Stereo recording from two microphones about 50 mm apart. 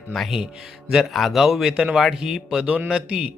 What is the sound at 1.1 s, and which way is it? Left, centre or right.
Speech, centre.